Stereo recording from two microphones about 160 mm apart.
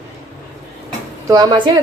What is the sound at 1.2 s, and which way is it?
Speech, 25° right (ahead or behind).